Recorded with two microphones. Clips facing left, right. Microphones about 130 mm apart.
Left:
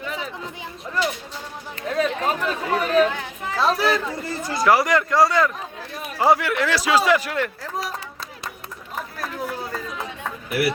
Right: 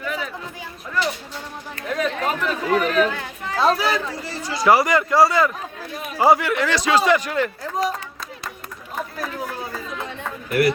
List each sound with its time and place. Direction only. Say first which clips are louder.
0.0 s a sound: right 2 dB; 30° left (ahead or behind)
1.9 s chatter: left 1 dB; 35° left (ahead or behind)
3.5 s chatter: right 1 dB; centre (ahead or behind)
4.3 s chatter: left 2 dB; 50° left (ahead or behind)
4.6 s speech: right 2 dB; centre (ahead or behind)
9.1 s run: left 3 dB; centre (ahead or behind)